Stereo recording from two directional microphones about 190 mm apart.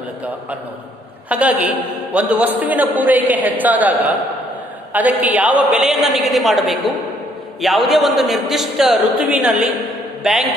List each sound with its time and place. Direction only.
1.3 s a man's voice: 5° right (ahead or behind)